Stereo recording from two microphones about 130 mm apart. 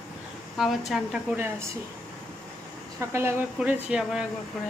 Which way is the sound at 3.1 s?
15° right (ahead or behind).